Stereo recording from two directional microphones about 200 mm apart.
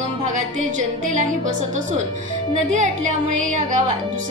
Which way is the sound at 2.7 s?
40° right (ahead or behind).